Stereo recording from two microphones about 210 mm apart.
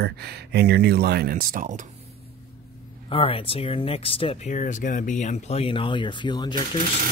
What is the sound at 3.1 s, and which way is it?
Speech, 25° left (ahead or behind).